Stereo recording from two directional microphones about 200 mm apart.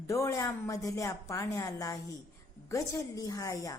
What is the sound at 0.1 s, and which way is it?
A woman's voice, 15° left (ahead or behind).